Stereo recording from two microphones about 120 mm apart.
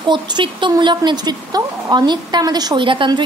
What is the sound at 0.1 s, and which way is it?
A woman's voice, 40° right (ahead or behind).